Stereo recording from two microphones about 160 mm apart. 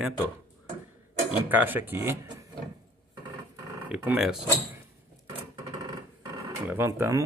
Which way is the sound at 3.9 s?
5° right (ahead or behind).